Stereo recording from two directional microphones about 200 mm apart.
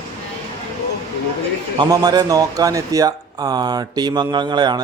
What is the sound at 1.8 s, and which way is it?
Speech, 20° right (ahead or behind).